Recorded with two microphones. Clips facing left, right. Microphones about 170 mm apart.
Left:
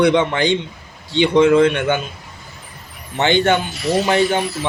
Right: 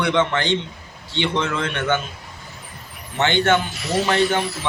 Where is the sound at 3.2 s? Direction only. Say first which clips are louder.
Left 3 dB; 15° left (ahead or behind).